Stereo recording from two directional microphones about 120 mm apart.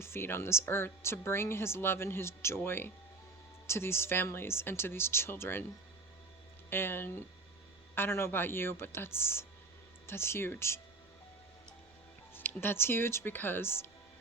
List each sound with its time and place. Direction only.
0.0 s speech: 20° left (ahead or behind)
6.7 s speech: 20° left (ahead or behind)
12.3 s speech: 20° left (ahead or behind)